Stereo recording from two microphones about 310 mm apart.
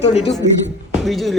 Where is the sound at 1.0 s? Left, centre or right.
Centre.